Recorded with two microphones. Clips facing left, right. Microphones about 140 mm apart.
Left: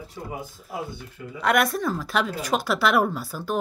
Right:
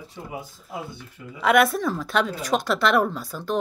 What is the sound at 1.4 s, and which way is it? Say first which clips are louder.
A woman's voice: right 3 dB; centre (ahead or behind).